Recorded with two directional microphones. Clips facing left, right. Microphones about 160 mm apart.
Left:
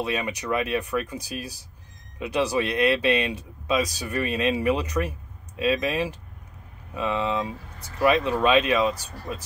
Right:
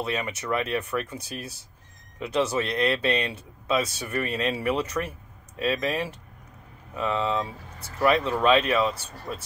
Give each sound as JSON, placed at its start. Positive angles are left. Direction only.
{"t": 0.0, "sound": "speech", "side_deg": 15}